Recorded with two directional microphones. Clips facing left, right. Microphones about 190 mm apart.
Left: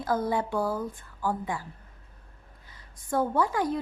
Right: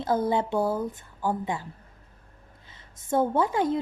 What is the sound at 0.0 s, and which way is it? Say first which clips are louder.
Speech: right 3 dB; 25° right (ahead or behind).